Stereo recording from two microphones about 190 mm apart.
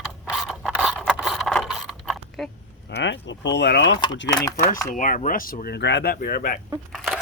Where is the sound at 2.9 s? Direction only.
70° left (ahead or behind).